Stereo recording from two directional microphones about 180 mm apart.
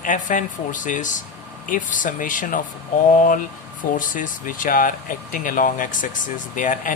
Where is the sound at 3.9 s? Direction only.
50° left (ahead or behind).